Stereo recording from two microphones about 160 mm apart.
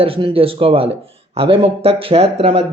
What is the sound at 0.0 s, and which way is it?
Speech, 35° right (ahead or behind).